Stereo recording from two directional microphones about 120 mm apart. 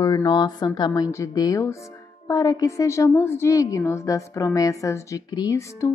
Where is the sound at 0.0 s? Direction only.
35° left (ahead or behind).